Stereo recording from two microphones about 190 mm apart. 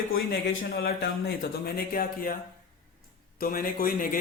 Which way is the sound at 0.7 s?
55° left (ahead or behind).